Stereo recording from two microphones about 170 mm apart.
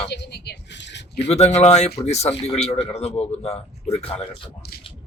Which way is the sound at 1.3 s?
40° left (ahead or behind).